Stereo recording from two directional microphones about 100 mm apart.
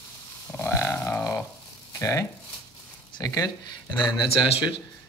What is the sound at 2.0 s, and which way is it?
Speech, 30° left (ahead or behind).